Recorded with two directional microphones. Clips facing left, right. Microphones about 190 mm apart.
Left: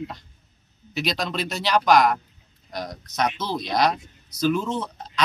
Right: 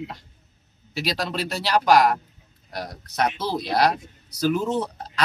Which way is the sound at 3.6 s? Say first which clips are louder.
Right 1 dB; 10° right (ahead or behind).